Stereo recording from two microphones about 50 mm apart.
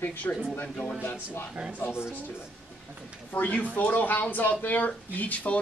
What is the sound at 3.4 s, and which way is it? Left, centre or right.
A man's voice, left.